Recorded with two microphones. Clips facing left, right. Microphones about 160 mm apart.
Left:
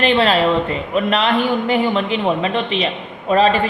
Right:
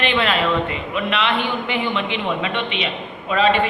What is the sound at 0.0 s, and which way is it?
A man's voice, 35° left (ahead or behind).